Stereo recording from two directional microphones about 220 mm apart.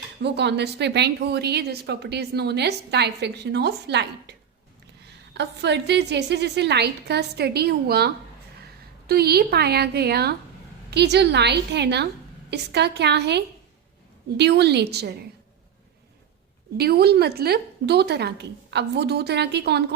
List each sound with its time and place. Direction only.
0.2 s a woman's voice: 50° right (ahead or behind)
16.7 s a woman's voice: 45° right (ahead or behind)